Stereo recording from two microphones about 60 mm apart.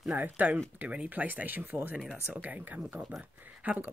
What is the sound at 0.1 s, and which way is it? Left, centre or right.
Speech, right.